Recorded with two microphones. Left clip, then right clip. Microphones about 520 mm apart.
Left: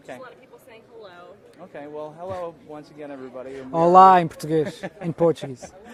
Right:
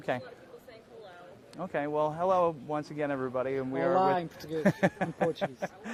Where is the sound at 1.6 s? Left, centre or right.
Right.